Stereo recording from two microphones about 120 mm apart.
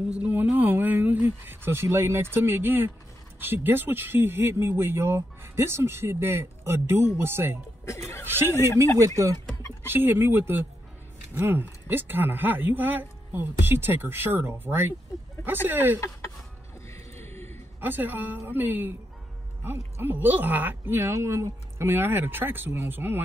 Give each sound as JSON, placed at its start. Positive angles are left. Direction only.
{"t": 0.1, "sound": "speech", "side_deg": -10}
{"t": 7.8, "sound": "speech", "side_deg": 25}
{"t": 8.3, "sound": "speech", "side_deg": -20}
{"t": 16.9, "sound": "a sound", "side_deg": 20}
{"t": 17.7, "sound": "speech", "side_deg": -15}
{"t": 20.0, "sound": "speech", "side_deg": -15}